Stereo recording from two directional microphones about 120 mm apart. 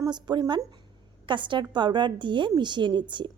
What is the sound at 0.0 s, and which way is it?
A woman's voice, 35° right (ahead or behind).